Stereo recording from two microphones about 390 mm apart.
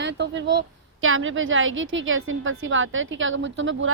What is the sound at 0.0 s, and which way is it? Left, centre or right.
A woman's voice, right.